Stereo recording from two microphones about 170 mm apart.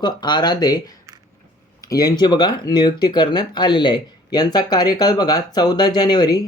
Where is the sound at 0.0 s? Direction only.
25° left (ahead or behind).